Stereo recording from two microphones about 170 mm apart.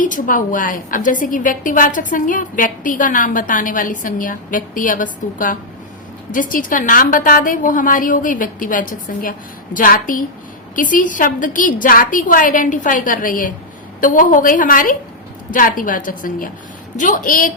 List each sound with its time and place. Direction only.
0.0 s a woman's voice: 50° left (ahead or behind)
6.3 s a woman's voice: 55° left (ahead or behind)